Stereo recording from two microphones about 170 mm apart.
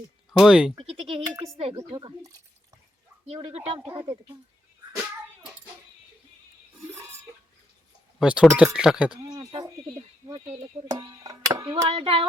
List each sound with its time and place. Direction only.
0.3 s speech: 5° right (ahead or behind)
0.8 s speech: 35° right (ahead or behind)
1.9 s music: 25° right (ahead or behind)
3.2 s speech: 35° right (ahead or behind)
3.9 s music: 30° right (ahead or behind)
6.9 s a sound: 15° right (ahead or behind)
8.2 s speech: 5° right (ahead or behind)
9.3 s a sound: 25° right (ahead or behind)
10.8 s music: 20° right (ahead or behind)